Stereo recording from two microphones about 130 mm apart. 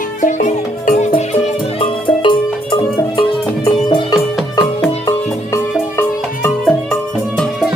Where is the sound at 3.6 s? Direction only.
30° left (ahead or behind).